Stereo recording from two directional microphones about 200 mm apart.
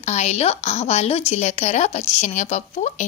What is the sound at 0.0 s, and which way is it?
Speech, 35° left (ahead or behind).